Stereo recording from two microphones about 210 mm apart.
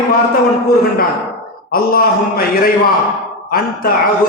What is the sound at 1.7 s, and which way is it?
A man's voice, 45° left (ahead or behind).